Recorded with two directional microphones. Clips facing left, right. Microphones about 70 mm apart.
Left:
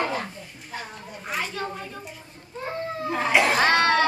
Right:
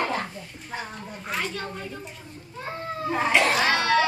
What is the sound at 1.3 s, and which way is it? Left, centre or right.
Speech, centre.